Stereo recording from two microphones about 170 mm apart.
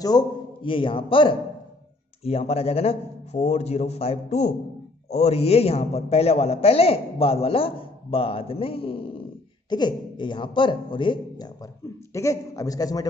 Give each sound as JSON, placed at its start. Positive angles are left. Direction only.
{"t": 0.0, "sound": "a man's voice", "side_deg": 25}